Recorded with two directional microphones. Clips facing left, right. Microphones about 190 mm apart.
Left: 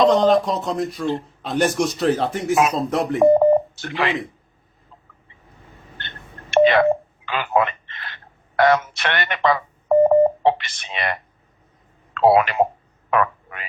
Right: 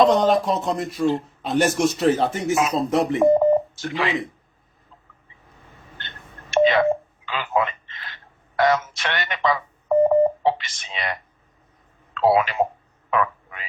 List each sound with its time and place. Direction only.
0.0 s a man's voice: centre (ahead or behind)
3.3 s telephone dialing: 60° left (ahead or behind)
6.5 s telephone dialing: 60° left (ahead or behind)
12.1 s speech: 60° left (ahead or behind)
13.1 s a sound: 60° left (ahead or behind)